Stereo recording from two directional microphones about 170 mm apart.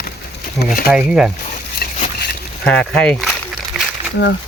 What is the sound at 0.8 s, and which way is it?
Speech, 5° right (ahead or behind).